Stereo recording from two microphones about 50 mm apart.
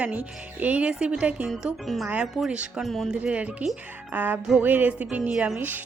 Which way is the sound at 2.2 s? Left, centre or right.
Centre.